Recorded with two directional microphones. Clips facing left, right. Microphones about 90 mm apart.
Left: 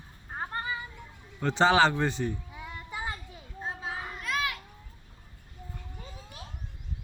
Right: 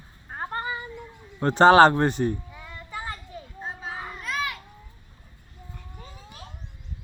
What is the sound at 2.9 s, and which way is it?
Children playing, 15° left (ahead or behind).